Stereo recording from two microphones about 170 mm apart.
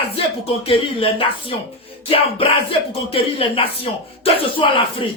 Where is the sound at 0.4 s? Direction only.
35° left (ahead or behind).